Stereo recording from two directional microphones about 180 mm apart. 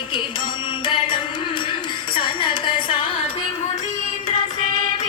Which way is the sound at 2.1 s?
25° left (ahead or behind).